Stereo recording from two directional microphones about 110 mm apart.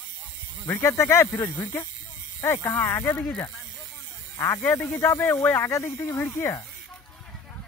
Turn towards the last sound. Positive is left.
turn(degrees=25)  # may be behind; listen again after turning